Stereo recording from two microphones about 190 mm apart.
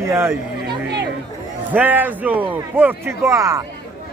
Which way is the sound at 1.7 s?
10° right (ahead or behind).